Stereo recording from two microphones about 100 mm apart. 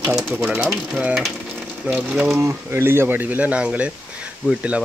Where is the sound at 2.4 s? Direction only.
25° right (ahead or behind).